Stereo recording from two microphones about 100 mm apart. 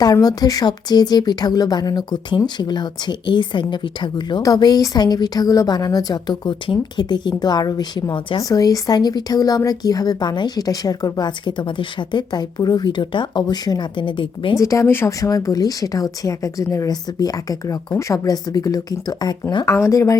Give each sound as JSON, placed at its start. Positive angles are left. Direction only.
{"t": 0.0, "sound": "a woman's voice", "side_deg": 40}
{"t": 8.4, "sound": "a woman's voice", "side_deg": 40}
{"t": 14.6, "sound": "speech", "side_deg": 30}
{"t": 19.7, "sound": "speech", "side_deg": 30}